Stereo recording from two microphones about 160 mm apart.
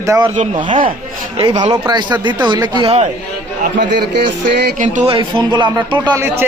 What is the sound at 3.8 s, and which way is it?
Speech, 90° right.